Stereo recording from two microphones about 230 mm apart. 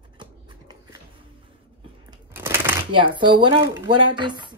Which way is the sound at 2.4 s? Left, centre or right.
Centre.